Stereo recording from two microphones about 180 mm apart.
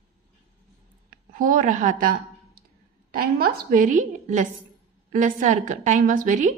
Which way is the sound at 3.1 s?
55° right (ahead or behind).